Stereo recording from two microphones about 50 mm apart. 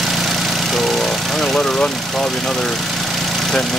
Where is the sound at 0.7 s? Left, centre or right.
Centre.